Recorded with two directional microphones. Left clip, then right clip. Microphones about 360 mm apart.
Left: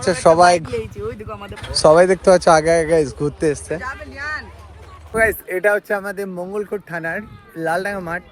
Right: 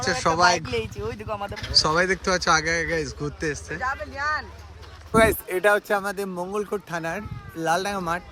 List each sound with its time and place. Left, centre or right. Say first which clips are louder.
0.0 s a man's voice: left 8 dB; centre
1.0 s speech: left 1 dB; centre
1.8 s a man's voice: left 12 dB; centre